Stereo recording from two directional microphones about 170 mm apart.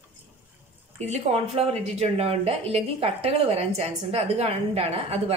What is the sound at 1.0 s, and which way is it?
Speech, 40° right (ahead or behind).